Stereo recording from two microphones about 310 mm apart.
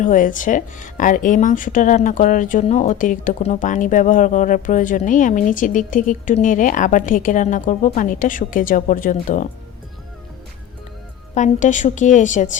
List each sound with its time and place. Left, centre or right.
0.0 s speech: left
11.3 s speech: left